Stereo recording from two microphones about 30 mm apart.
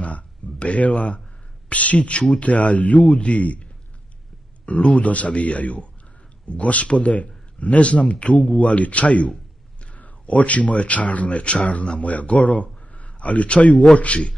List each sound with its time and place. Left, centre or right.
0.0 s a sound: left
1.7 s a man's voice: left
4.6 s a man's voice: left